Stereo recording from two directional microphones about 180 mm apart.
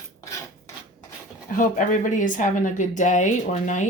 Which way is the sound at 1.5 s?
45° left (ahead or behind).